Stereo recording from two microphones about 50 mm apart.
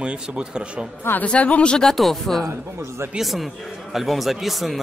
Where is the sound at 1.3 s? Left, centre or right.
Left.